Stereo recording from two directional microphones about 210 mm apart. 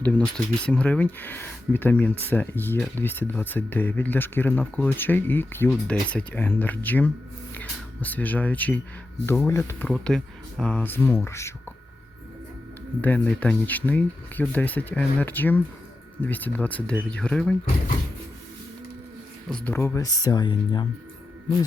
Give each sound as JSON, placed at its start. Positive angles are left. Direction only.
{"t": 0.0, "sound": "speech", "side_deg": 5}
{"t": 13.0, "sound": "speech", "side_deg": 5}
{"t": 19.5, "sound": "speech", "side_deg": 5}